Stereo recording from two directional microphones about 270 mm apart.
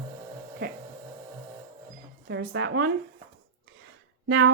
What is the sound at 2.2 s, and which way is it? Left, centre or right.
Speech, right.